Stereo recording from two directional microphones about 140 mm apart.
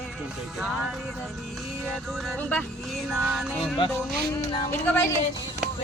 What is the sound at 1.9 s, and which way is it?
Music, 5° left (ahead or behind).